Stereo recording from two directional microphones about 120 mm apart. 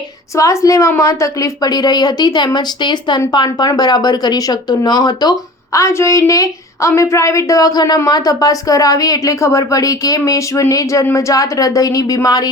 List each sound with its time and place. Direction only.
0.3 s a woman's voice: 25° left (ahead or behind)
5.7 s a woman's voice: 25° left (ahead or behind)